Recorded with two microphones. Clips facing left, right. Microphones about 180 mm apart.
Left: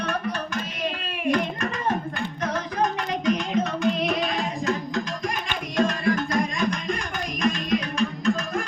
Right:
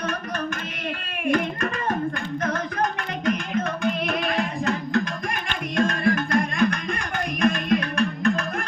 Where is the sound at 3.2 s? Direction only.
55° right (ahead or behind).